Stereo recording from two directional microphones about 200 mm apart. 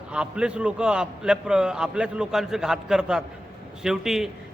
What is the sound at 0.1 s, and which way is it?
A man's voice, 5° right (ahead or behind).